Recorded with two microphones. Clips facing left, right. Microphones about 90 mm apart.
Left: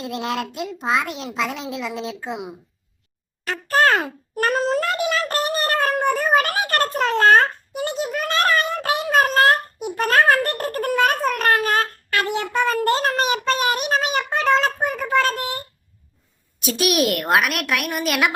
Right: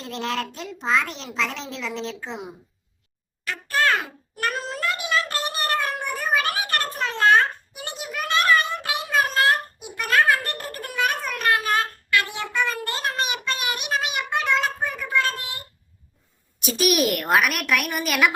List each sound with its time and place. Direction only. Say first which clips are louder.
0.0 s a child's voice: left 3 dB; 10° left (ahead or behind)
3.4 s a sound: left 5 dB; 35° left (ahead or behind)
14.5 s child singing: left 7 dB; 40° left (ahead or behind)
16.6 s a woman's voice: left 1 dB; centre (ahead or behind)